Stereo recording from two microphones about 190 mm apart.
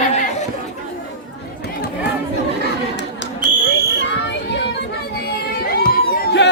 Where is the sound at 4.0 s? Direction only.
65° left (ahead or behind).